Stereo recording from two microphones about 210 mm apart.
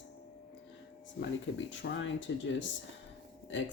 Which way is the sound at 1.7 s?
60° left (ahead or behind).